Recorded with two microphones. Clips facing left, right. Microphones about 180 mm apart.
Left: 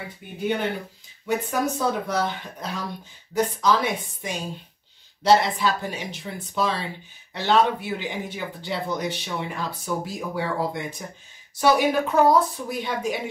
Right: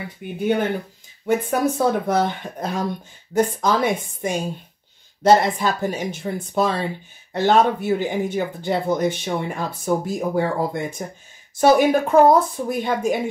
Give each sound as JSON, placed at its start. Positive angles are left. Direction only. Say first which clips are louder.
{"t": 1.2, "sound": "speech", "louder": "right 5 dB", "side_deg": -55}